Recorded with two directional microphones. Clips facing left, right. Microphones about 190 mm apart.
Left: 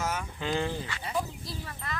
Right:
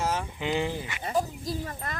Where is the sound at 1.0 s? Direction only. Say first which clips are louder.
Right 8 dB; 45° right (ahead or behind).